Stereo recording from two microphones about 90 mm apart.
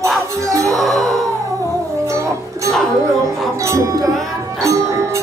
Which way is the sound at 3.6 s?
35° right (ahead or behind).